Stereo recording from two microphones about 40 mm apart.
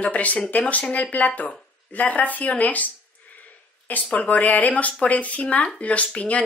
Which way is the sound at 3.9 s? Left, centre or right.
Left.